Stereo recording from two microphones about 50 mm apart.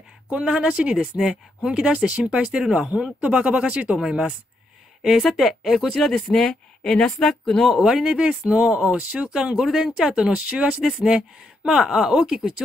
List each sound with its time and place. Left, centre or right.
0.3 s speech: right
1.1 s speech: centre
2.0 s speech: right
5.0 s speech: centre
6.1 s speech: centre
7.6 s speech: centre